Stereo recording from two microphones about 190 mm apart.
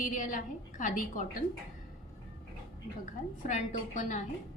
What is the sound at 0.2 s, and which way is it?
A woman's voice, 45° left (ahead or behind).